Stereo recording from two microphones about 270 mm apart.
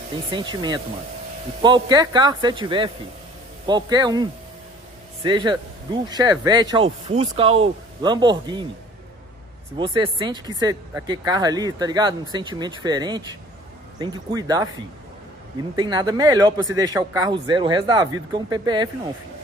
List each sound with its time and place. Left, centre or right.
0.3 s speech: centre
9.8 s speech: centre
15.7 s speech: centre